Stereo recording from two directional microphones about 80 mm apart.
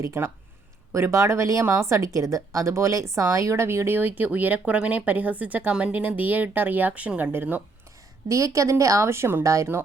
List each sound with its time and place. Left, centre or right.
0.0 s a woman's voice: right
8.3 s speech: right